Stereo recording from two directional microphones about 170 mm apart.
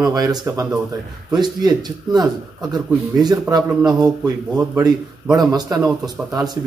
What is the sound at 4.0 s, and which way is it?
Speech, 20° right (ahead or behind).